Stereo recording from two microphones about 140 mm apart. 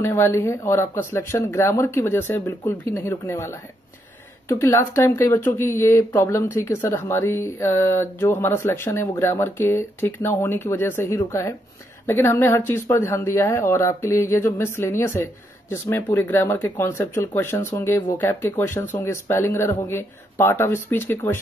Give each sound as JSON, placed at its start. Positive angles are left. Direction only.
{"t": 0.0, "sound": "speech", "side_deg": 20}